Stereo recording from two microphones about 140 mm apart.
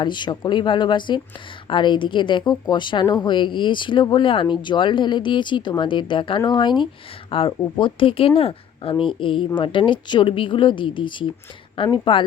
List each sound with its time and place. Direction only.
0.0 s a woman's voice: 35° left (ahead or behind)